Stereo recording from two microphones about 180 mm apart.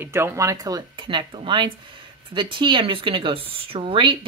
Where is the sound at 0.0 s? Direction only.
15° right (ahead or behind).